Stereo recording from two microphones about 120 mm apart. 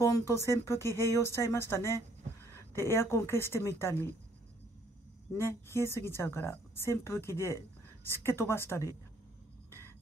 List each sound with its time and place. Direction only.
0.0 s a woman's voice: 25° left (ahead or behind)
5.4 s a woman's voice: 20° left (ahead or behind)